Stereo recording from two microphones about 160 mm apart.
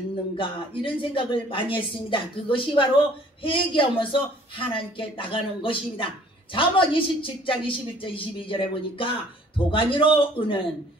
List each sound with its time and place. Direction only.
0.4 s speech: 30° left (ahead or behind)